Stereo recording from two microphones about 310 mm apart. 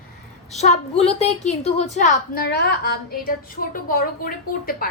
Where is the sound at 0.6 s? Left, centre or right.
Left.